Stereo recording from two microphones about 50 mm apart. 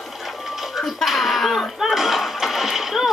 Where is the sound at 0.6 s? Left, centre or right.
Centre.